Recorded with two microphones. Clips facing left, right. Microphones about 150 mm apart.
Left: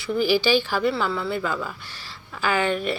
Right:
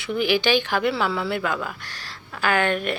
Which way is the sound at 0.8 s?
Centre (ahead or behind).